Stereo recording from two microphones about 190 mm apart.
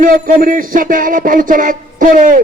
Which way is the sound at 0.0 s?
45° right (ahead or behind).